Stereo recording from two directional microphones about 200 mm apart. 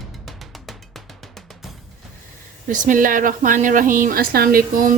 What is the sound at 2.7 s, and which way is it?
Speech, 40° right (ahead or behind).